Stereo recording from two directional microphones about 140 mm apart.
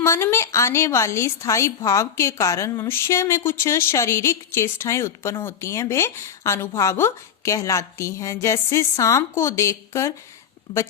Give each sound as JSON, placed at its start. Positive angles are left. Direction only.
{"t": 0.0, "sound": "a woman's voice", "side_deg": 20}